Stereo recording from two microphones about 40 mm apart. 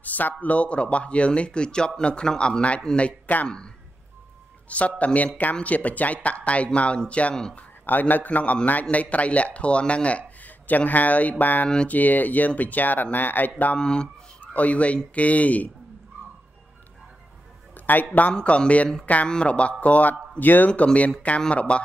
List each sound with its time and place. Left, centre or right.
0.0 s a man's voice: left
3.4 s speech: left
4.6 s speech: left
7.8 s speech: left
13.7 s speech: left
14.4 s speech: left
17.9 s speech: left
18.4 s speech: left
20.7 s speech: left